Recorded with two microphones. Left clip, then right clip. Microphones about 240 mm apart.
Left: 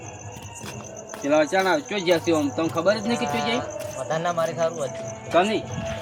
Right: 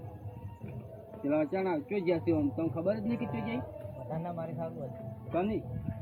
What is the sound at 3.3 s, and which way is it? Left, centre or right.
Speech, left.